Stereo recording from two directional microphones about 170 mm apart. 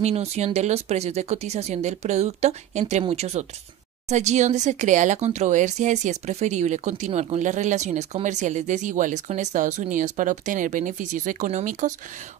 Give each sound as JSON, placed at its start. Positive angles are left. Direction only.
{"t": 0.0, "sound": "speech", "side_deg": -40}